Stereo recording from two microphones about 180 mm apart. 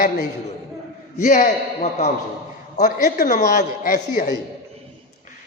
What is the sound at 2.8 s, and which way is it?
A woman's voice, 55° left (ahead or behind).